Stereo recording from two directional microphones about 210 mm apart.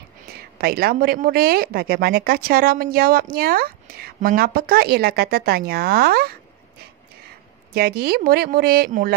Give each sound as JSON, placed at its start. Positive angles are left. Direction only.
{"t": 0.6, "sound": "a woman's voice", "side_deg": -45}
{"t": 7.7, "sound": "a woman's voice", "side_deg": -45}